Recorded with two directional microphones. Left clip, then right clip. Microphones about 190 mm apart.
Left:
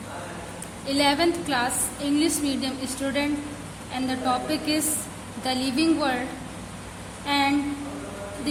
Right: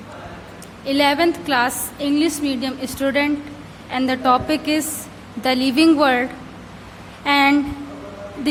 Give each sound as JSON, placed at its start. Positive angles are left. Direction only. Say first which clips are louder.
{"t": 0.9, "sound": "a woman's voice", "louder": "right 5 dB", "side_deg": -20}
{"t": 7.3, "sound": "a woman's voice", "louder": "right 8 dB", "side_deg": -35}